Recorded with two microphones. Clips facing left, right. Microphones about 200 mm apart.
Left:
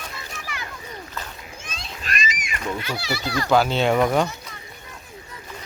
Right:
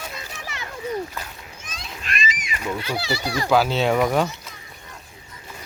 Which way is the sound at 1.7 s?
30° left (ahead or behind).